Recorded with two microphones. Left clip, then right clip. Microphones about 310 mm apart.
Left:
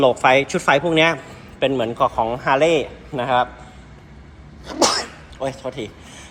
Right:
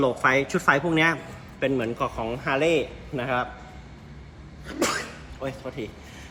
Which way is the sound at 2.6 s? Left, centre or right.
Left.